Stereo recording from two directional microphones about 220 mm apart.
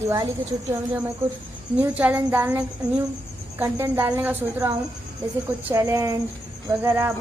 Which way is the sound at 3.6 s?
10° right (ahead or behind).